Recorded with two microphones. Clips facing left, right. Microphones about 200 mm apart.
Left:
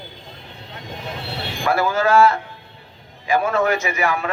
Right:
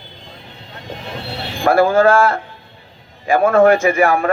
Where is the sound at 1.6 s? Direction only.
50° right (ahead or behind).